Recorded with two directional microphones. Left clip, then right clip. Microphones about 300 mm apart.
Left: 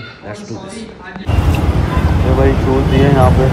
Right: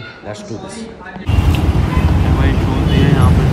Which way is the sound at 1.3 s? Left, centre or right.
Centre.